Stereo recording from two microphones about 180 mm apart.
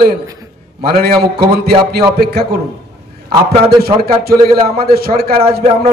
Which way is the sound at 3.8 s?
60° right (ahead or behind).